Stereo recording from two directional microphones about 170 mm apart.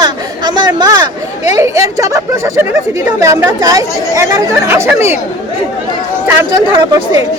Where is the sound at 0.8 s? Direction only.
20° right (ahead or behind).